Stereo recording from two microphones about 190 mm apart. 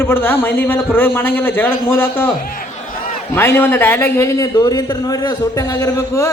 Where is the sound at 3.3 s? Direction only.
10° left (ahead or behind).